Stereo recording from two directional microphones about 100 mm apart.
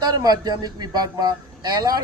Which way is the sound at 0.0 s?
40° right (ahead or behind).